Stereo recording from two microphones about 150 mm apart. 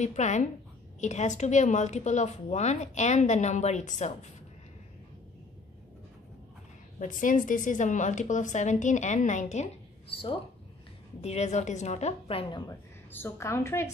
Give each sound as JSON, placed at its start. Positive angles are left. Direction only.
{"t": 0.0, "sound": "a woman's voice", "side_deg": 50}
{"t": 7.0, "sound": "a woman's voice", "side_deg": 60}
{"t": 10.0, "sound": "speech", "side_deg": 35}
{"t": 11.1, "sound": "a woman's voice", "side_deg": 45}
{"t": 13.1, "sound": "a woman's voice", "side_deg": 15}